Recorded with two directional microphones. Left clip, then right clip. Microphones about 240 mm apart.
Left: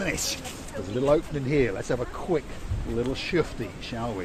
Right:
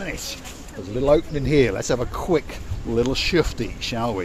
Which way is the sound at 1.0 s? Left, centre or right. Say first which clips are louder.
Right 5 dB; right.